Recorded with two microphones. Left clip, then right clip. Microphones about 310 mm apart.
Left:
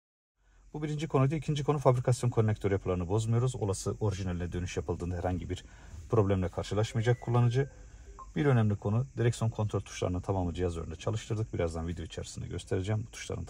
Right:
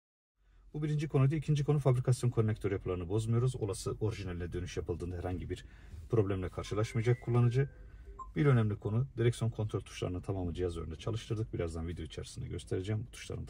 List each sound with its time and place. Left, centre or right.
0.7 s speech: left